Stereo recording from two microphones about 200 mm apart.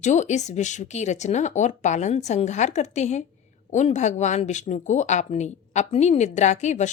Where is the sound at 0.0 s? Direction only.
35° left (ahead or behind).